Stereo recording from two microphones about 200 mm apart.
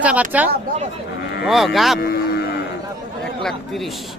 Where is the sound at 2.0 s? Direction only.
50° left (ahead or behind).